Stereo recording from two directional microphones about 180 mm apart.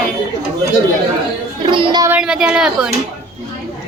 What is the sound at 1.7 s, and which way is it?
Speech, 25° right (ahead or behind).